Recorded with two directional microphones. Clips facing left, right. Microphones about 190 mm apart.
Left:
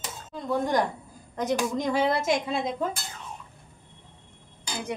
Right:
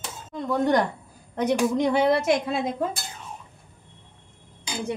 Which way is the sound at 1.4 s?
65° right (ahead or behind).